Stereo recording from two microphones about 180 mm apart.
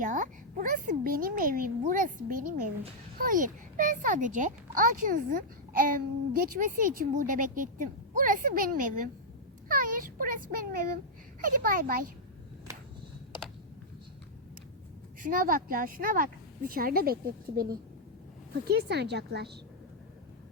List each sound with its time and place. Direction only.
0.0 s a child's voice: 45° right (ahead or behind)
15.2 s a child's voice: 50° right (ahead or behind)
18.6 s a woman's voice: 60° right (ahead or behind)